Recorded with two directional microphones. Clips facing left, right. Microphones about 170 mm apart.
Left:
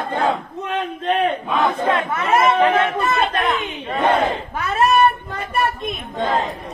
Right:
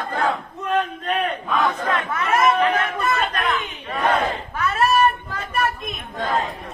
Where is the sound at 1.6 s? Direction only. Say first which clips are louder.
Left 5 dB; 30° left (ahead or behind).